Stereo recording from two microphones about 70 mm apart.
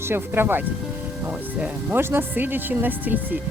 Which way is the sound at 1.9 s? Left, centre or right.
Right.